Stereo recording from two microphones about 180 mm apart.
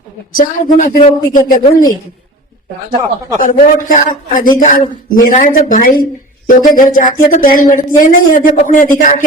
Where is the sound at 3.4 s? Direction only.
45° left (ahead or behind).